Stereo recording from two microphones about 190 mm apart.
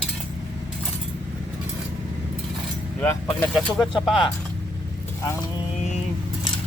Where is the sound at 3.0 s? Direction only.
5° left (ahead or behind).